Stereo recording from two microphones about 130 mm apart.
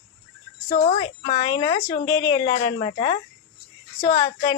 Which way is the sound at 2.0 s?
30° left (ahead or behind).